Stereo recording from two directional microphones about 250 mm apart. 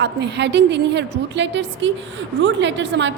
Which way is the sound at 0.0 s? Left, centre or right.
Right.